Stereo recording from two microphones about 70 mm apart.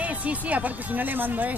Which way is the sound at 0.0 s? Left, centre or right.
Centre.